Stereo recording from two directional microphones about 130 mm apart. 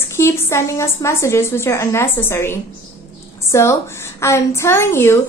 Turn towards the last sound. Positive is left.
turn(degrees=20)  # may be behind; listen again after turning